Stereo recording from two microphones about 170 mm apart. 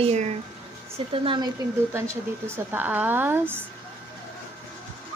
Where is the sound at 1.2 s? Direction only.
30° right (ahead or behind).